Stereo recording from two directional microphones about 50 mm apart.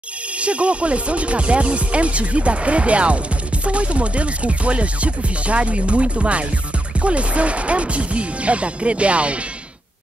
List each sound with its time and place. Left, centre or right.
0.4 s speech: right